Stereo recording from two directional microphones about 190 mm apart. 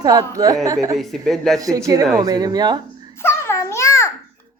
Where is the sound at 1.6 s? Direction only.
20° right (ahead or behind).